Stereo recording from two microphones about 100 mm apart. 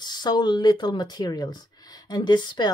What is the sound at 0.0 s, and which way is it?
A woman's voice, 45° left (ahead or behind).